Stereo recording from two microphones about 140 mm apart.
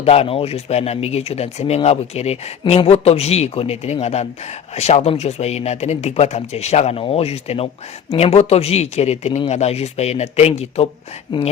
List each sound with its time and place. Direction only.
0.0 s speech: 45° left (ahead or behind)
11.3 s speech: 35° left (ahead or behind)